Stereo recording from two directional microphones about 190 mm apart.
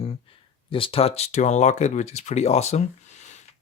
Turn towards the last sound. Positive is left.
turn(degrees=35)  # may be behind; listen again after turning